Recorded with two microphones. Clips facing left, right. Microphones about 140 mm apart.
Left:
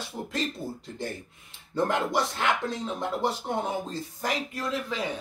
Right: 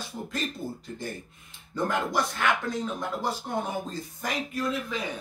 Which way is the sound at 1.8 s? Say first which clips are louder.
Even; 25° left (ahead or behind).